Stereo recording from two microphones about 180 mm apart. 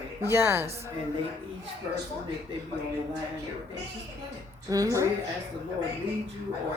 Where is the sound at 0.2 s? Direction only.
15° right (ahead or behind).